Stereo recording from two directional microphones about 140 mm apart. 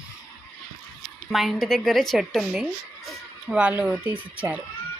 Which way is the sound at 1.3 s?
Centre (ahead or behind).